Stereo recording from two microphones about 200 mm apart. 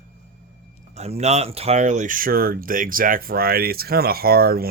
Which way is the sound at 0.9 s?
35° right (ahead or behind).